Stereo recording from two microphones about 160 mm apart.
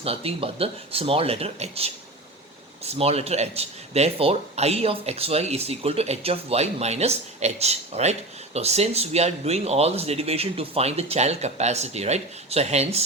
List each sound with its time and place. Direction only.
0.0 s speech: 40° right (ahead or behind)